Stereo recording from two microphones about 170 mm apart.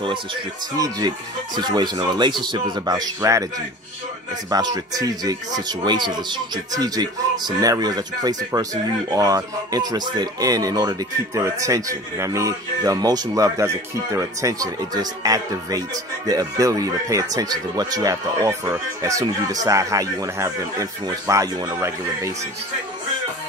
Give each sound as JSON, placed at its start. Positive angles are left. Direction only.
{"t": 0.7, "sound": "a man's voice", "side_deg": -20}